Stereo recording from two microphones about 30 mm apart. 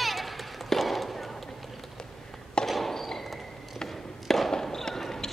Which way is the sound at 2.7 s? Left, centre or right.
Centre.